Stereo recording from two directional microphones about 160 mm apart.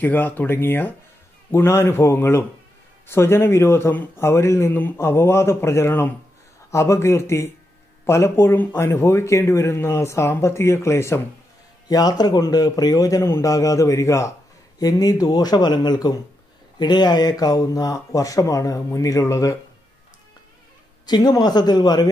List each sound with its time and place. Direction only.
0.0 s speech: 10° left (ahead or behind)
21.0 s speech: 25° left (ahead or behind)